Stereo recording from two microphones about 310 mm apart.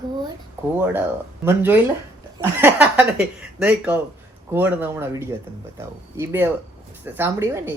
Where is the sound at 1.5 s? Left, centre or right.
Centre.